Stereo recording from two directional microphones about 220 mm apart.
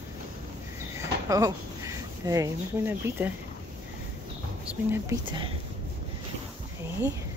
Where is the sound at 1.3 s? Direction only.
15° right (ahead or behind).